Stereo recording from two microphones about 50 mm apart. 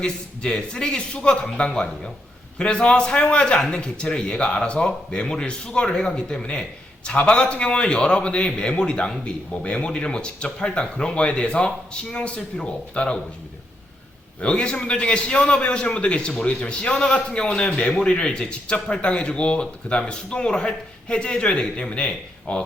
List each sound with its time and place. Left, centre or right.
0.0 s speech: centre
14.4 s speech: left